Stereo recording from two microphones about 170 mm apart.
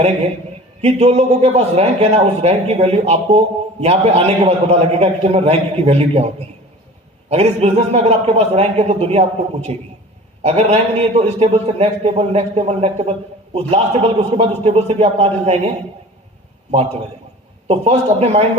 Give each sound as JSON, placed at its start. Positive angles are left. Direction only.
{"t": 0.8, "sound": "a man's voice", "side_deg": -40}
{"t": 17.7, "sound": "a man's voice", "side_deg": -40}